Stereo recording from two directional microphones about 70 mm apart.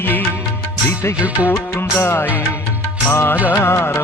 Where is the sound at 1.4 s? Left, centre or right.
Left.